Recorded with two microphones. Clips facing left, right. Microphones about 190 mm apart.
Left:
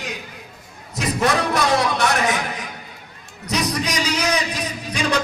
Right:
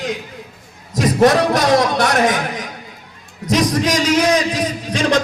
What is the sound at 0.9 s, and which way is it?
Speech, 45° right (ahead or behind).